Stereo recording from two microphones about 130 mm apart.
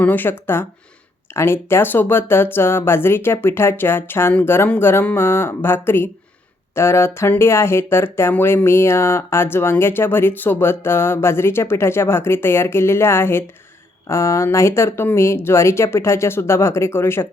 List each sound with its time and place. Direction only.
0.0 s speech: 15° left (ahead or behind)